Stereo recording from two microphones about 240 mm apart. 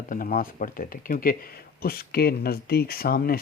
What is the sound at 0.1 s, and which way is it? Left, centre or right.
Speech, left.